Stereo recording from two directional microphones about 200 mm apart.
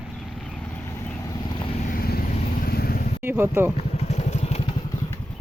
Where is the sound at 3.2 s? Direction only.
10° right (ahead or behind).